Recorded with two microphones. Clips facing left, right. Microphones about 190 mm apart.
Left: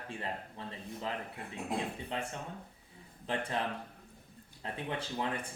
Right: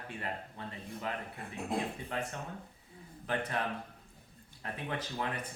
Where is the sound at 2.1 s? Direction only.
25° left (ahead or behind).